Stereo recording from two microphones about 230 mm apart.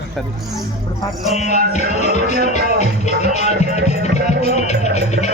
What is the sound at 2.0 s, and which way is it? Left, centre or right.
Music, left.